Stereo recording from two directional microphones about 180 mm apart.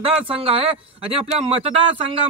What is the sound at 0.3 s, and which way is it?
Speech, 30° right (ahead or behind).